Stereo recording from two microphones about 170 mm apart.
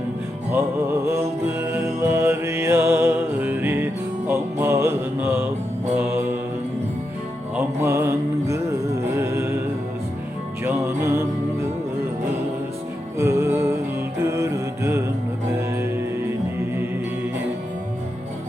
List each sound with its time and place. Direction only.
0.5 s music: 15° right (ahead or behind)
6.0 s mantra: 10° right (ahead or behind)
7.5 s music: 15° right (ahead or behind)
10.6 s music: 15° right (ahead or behind)
13.1 s music: 15° right (ahead or behind)